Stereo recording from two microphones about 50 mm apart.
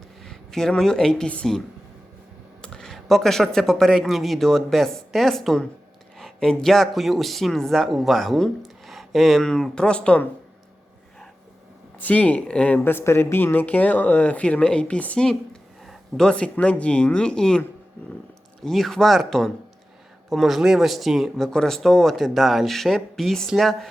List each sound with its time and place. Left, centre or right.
0.2 s a sound: centre
0.8 s speech: centre
2.6 s speech: centre
8.6 s a sound: centre
9.5 s speech: centre
11.9 s speech: left
12.8 s speech: left; by 17.6 s centre
18.6 s speech: centre
21.3 s speech: centre